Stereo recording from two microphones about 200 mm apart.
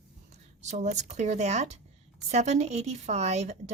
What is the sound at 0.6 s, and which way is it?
A woman's voice, 35° right (ahead or behind).